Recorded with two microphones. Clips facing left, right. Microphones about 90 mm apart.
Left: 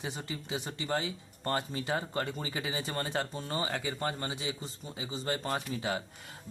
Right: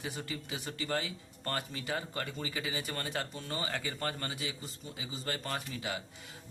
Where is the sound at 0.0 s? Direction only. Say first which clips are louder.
Left 1 dB; 25° left (ahead or behind).